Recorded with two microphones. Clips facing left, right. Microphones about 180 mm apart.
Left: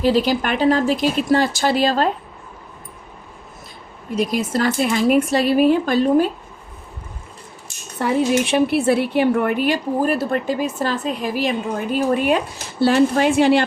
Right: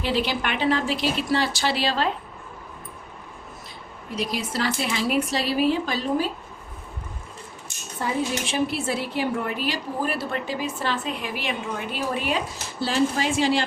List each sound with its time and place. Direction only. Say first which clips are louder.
0.0 s a woman's voice: left 8 dB; 40° left (ahead or behind)
4.1 s a woman's voice: left 8 dB; 50° left (ahead or behind)
7.9 s a woman's voice: left 8 dB; 65° left (ahead or behind)